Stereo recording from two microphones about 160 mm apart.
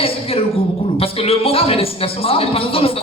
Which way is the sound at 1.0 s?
35° left (ahead or behind).